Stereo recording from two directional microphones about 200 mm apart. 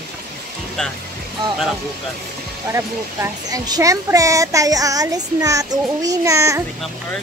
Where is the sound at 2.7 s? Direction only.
15° right (ahead or behind).